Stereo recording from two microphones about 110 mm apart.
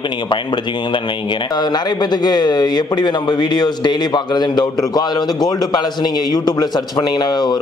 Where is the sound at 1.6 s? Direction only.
40° left (ahead or behind).